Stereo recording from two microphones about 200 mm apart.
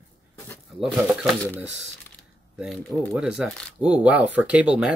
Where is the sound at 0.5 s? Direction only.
Centre (ahead or behind).